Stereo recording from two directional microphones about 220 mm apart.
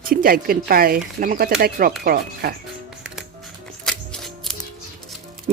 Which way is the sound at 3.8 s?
Centre (ahead or behind).